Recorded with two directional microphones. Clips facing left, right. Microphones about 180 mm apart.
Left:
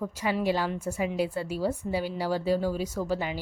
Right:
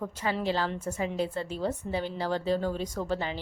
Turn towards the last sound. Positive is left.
turn(degrees=10)  # may be behind; listen again after turning